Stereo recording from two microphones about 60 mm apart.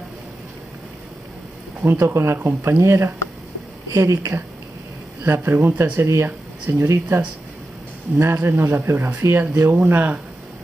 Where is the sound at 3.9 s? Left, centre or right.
Right.